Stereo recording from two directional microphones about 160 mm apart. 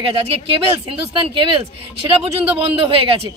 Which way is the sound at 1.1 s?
35° right (ahead or behind).